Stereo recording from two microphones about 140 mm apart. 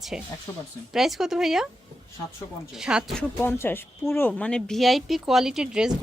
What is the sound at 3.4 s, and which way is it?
Speech, 15° left (ahead or behind).